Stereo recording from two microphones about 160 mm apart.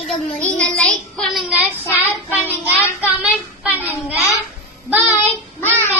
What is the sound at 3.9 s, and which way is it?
Speech, 15° left (ahead or behind).